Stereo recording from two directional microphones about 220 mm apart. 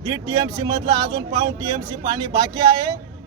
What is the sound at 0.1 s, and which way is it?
Speech, 20° right (ahead or behind).